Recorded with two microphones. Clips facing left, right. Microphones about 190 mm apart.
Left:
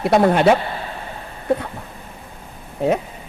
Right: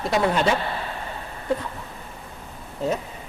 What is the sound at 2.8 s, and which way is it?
Speech, 60° left (ahead or behind).